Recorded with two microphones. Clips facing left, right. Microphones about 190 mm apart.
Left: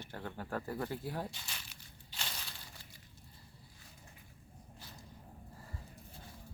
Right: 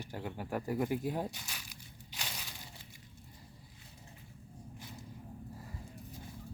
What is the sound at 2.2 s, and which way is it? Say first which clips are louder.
Crushing: right 1 dB; 10° right (ahead or behind).